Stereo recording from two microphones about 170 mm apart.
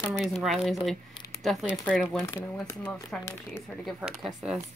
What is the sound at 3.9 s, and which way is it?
Speech, 5° right (ahead or behind).